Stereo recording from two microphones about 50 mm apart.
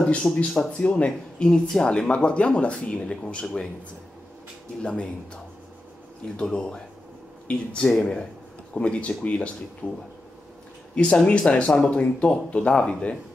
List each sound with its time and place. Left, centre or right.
0.0 s speech: left
4.8 s speech: left
6.4 s speech: centre